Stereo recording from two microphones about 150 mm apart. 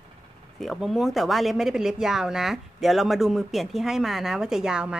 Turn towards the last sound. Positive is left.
turn(degrees=-5)  # may be behind; listen again after turning